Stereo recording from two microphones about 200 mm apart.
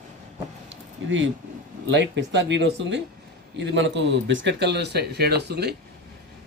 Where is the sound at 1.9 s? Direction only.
65° right (ahead or behind).